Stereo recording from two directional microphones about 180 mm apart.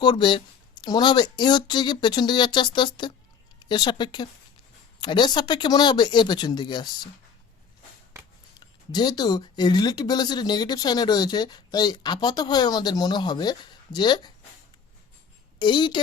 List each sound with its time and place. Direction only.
0.0 s speech: 25° left (ahead or behind)
8.5 s speech: 25° left (ahead or behind)
15.5 s a woman's voice: 25° left (ahead or behind)